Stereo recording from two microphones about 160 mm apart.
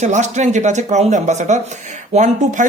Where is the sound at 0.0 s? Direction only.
45° right (ahead or behind).